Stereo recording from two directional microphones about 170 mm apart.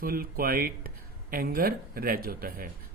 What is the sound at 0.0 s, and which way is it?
Speech, 60° right (ahead or behind).